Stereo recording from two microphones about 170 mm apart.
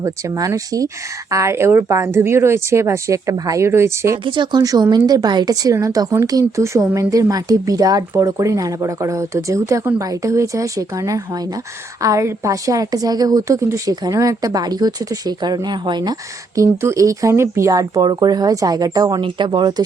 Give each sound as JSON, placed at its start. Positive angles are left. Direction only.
{"t": 0.0, "sound": "a woman's voice", "side_deg": -20}
{"t": 4.2, "sound": "a woman's voice", "side_deg": -30}